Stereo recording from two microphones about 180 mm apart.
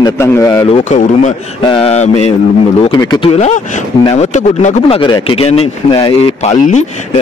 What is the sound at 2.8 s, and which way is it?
Speech, 25° left (ahead or behind).